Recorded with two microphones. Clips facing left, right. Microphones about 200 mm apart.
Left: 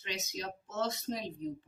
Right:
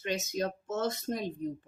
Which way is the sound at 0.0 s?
50° right (ahead or behind).